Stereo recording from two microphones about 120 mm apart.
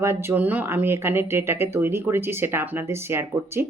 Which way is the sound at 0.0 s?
20° right (ahead or behind).